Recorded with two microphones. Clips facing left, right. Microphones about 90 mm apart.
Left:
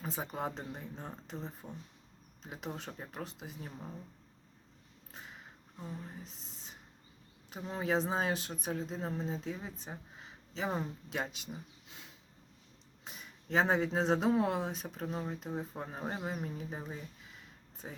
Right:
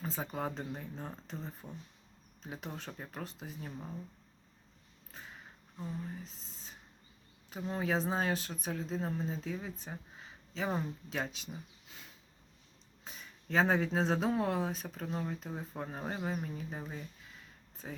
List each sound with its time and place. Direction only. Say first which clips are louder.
0.0 s speech: even; 15° left (ahead or behind)
2.5 s speech: left 1 dB; 5° left (ahead or behind)
5.8 s speech: right 3 dB; 20° left (ahead or behind)
7.5 s speech: left 1 dB; 10° left (ahead or behind)
13.1 s speech: left 1 dB; 15° left (ahead or behind)